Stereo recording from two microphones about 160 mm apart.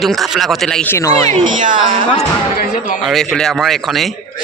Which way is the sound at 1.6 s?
55° right (ahead or behind).